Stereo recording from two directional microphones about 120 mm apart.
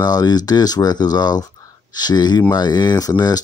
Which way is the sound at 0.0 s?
35° left (ahead or behind).